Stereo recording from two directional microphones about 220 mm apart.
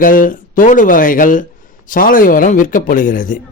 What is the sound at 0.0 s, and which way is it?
A man's voice, 40° left (ahead or behind).